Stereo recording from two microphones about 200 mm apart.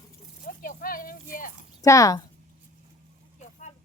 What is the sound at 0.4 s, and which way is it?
Speech, 40° left (ahead or behind).